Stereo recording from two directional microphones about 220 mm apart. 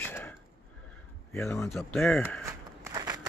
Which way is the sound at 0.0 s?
10° left (ahead or behind).